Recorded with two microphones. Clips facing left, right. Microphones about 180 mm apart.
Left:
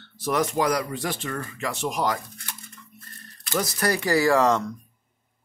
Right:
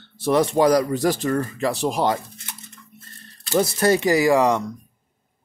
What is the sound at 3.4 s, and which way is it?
Speech, 25° right (ahead or behind).